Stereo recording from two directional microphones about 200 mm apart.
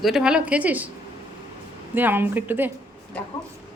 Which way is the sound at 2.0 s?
10° right (ahead or behind).